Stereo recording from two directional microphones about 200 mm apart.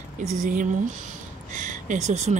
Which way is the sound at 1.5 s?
40° right (ahead or behind).